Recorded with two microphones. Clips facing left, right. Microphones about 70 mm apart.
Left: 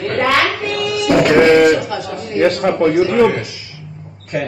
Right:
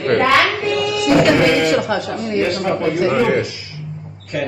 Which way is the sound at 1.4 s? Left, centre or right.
Left.